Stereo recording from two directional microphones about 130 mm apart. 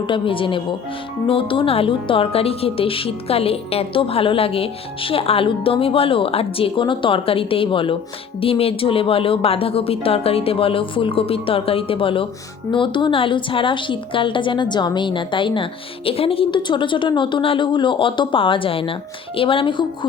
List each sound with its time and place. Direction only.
0.0 s a woman's voice: 40° left (ahead or behind)